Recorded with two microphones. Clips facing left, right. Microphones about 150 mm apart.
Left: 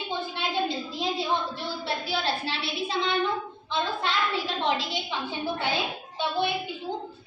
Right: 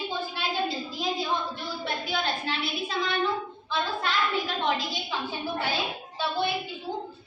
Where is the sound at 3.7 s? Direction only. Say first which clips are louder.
Left 1 dB; 25° left (ahead or behind).